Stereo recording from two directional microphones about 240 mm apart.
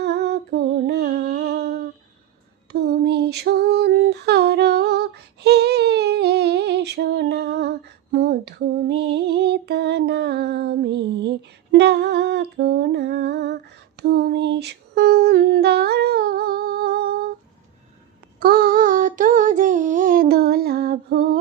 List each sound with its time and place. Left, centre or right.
0.0 s humming: right
2.7 s female singing: right
18.3 s a sound: right